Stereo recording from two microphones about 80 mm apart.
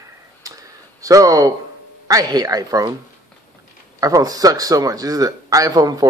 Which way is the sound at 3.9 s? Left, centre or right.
Right.